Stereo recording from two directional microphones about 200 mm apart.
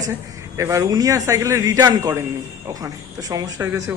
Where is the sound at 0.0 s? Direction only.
15° right (ahead or behind).